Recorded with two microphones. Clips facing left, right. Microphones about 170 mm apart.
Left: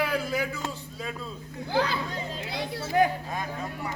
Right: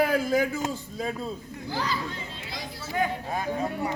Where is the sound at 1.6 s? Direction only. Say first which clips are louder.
Left 4 dB; 60° left (ahead or behind).